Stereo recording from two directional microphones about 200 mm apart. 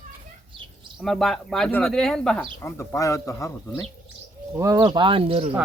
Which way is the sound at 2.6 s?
15° left (ahead or behind).